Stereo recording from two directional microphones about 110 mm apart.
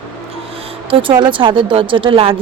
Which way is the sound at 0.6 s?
60° right (ahead or behind).